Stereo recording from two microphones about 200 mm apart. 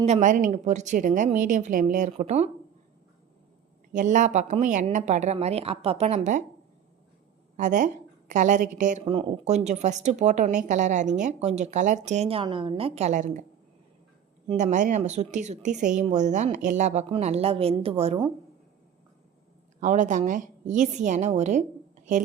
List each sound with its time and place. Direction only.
0.0 s a woman's voice: 35° right (ahead or behind)
3.9 s a woman's voice: 40° right (ahead or behind)
7.5 s a woman's voice: 40° right (ahead or behind)
14.4 s a woman's voice: 35° right (ahead or behind)
19.8 s a woman's voice: 40° right (ahead or behind)